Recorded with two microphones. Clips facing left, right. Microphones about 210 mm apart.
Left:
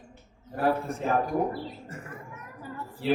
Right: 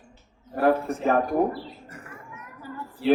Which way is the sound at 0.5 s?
55° right (ahead or behind).